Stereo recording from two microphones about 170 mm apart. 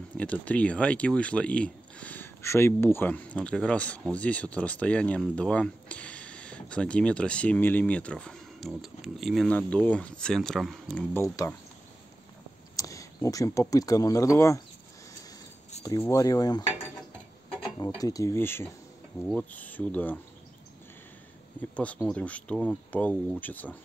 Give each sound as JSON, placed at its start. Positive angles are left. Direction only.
{"t": 0.2, "sound": "speech", "side_deg": 5}
{"t": 11.4, "sound": "speech", "side_deg": 20}
{"t": 12.7, "sound": "speech", "side_deg": 20}
{"t": 15.8, "sound": "speech", "side_deg": 20}
{"t": 17.7, "sound": "speech", "side_deg": 20}
{"t": 21.5, "sound": "speech", "side_deg": 10}